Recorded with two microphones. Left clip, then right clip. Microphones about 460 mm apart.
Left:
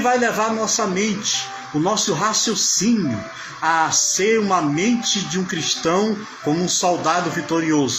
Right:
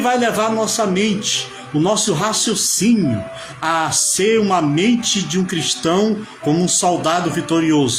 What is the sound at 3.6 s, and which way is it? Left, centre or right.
A man's voice, right.